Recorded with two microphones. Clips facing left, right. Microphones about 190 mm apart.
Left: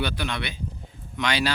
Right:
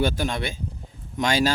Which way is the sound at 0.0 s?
45° right (ahead or behind).